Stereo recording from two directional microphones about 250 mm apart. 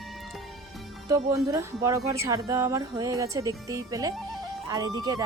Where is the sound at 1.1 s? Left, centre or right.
Centre.